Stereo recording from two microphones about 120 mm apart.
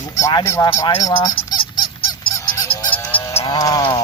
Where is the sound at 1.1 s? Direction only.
40° left (ahead or behind).